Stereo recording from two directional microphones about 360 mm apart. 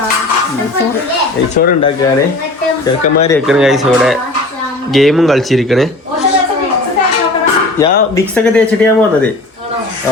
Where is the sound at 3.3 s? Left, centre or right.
Centre.